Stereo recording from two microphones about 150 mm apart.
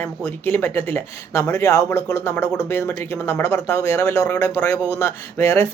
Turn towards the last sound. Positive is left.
turn(degrees=15)  # may be behind; listen again after turning